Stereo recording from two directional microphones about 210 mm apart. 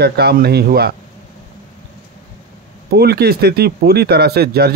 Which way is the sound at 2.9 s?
50° right (ahead or behind).